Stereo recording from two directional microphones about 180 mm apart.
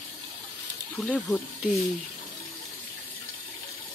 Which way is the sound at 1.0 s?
5° left (ahead or behind).